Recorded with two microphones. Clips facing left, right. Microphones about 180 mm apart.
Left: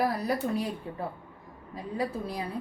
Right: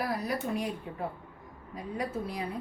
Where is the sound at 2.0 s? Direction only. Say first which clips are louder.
Left 2 dB; 35° left (ahead or behind).